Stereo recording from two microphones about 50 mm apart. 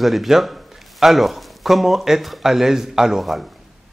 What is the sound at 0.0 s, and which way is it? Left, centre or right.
A man's voice, centre.